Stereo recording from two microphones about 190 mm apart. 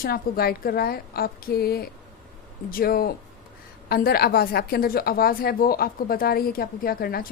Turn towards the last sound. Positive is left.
turn(degrees=50)  # may be behind; listen again after turning